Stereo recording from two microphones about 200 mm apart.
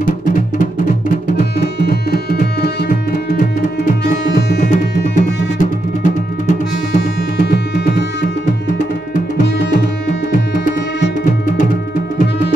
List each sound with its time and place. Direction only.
1.6 s music: 50° left (ahead or behind)
7.5 s music: 55° left (ahead or behind)
10.3 s music: 45° left (ahead or behind)